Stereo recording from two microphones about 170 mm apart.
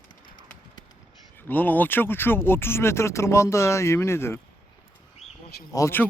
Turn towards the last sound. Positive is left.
turn(degrees=15)  # may be behind; listen again after turning